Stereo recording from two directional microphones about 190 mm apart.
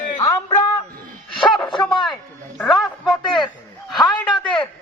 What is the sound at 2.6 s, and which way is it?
Speech, centre (ahead or behind).